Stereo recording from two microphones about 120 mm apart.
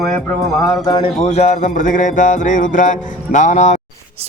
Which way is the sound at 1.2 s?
65° left (ahead or behind).